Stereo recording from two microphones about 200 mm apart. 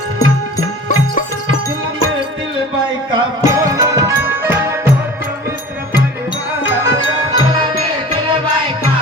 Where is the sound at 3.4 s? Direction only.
15° right (ahead or behind).